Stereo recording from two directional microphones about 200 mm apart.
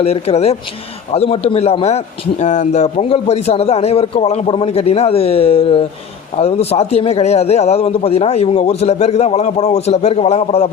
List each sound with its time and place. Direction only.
0.0 s a man's voice: 30° left (ahead or behind)